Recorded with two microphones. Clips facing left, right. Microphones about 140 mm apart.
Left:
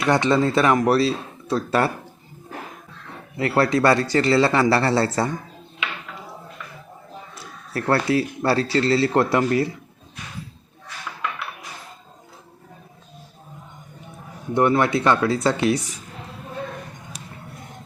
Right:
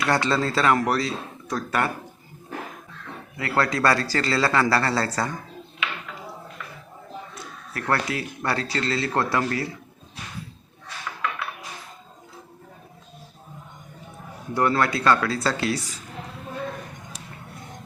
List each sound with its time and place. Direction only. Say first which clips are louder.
0.0 s speech: left 4 dB; 20° left (ahead or behind)
3.3 s speech: left 5 dB; 25° left (ahead or behind)
7.7 s speech: left 6 dB; 30° left (ahead or behind)
14.5 s speech: left 4 dB; 20° left (ahead or behind)